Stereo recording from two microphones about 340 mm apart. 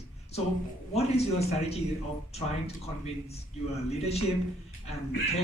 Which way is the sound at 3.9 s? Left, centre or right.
Centre.